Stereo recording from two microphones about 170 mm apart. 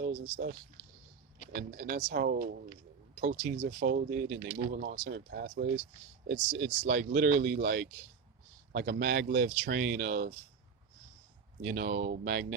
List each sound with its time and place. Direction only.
0.0 s speech: 60° right (ahead or behind)
1.5 s speech: 60° right (ahead or behind)
3.6 s speech: 75° right (ahead or behind)
4.7 s speech: 55° right (ahead or behind)
5.0 s speech: 70° right (ahead or behind)
6.2 s speech: 55° right (ahead or behind)
11.7 s speech: 60° right (ahead or behind)